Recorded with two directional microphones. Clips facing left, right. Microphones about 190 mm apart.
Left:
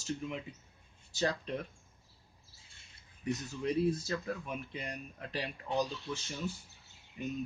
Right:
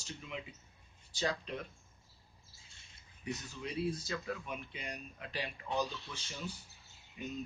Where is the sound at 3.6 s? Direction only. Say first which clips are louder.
Left 6 dB; 45° left (ahead or behind).